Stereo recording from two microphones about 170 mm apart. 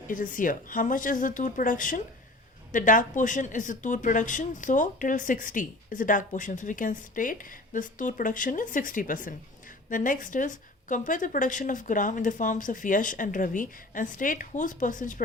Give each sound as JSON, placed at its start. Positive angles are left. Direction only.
{"t": 0.1, "sound": "speech", "side_deg": 50}